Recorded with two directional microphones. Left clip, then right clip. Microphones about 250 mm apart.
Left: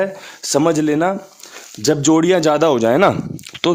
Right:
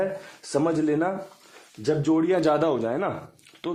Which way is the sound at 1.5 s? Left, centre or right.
Left.